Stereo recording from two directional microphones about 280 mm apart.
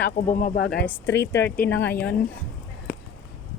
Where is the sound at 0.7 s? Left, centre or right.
Centre.